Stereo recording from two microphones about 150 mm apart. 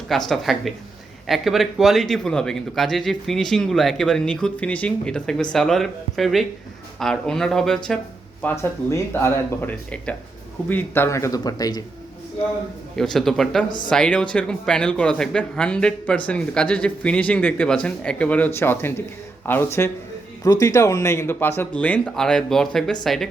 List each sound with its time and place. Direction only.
0.3 s a man's voice: centre (ahead or behind)
8.4 s a man's voice: 15° left (ahead or behind)
13.0 s a man's voice: centre (ahead or behind)
13.7 s speech: 30° left (ahead or behind)
13.9 s a man's voice: 5° left (ahead or behind)